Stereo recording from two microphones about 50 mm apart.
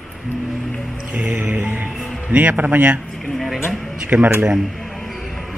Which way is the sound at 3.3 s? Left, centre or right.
Centre.